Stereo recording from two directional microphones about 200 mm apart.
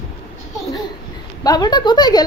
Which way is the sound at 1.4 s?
20° left (ahead or behind).